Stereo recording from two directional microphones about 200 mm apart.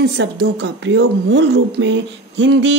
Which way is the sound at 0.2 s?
65° right (ahead or behind).